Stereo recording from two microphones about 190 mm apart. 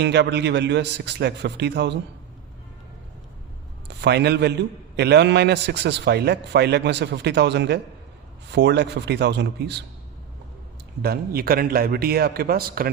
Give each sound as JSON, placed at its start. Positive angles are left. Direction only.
{"t": 0.0, "sound": "a man's voice", "side_deg": -65}
{"t": 3.8, "sound": "a man's voice", "side_deg": -65}
{"t": 11.0, "sound": "a man's voice", "side_deg": -55}